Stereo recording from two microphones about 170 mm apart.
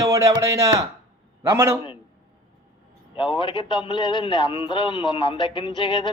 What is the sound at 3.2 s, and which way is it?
A man's voice, 30° left (ahead or behind).